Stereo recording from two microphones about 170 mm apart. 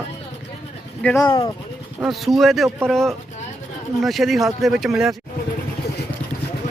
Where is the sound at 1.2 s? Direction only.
25° left (ahead or behind).